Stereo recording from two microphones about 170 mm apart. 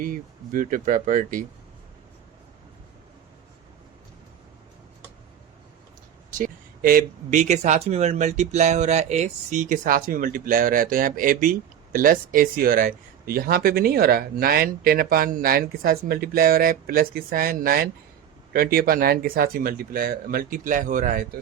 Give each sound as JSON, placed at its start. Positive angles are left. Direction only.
{"t": 0.0, "sound": "speech", "side_deg": -55}
{"t": 6.4, "sound": "speech", "side_deg": -55}